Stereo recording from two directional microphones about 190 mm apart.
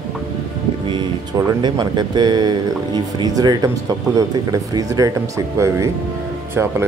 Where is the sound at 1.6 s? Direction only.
20° right (ahead or behind).